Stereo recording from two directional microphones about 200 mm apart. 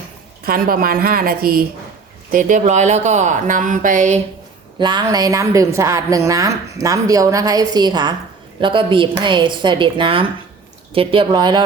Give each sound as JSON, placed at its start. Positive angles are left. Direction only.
{"t": 0.4, "sound": "a woman's voice", "side_deg": -45}
{"t": 4.8, "sound": "a woman's voice", "side_deg": -20}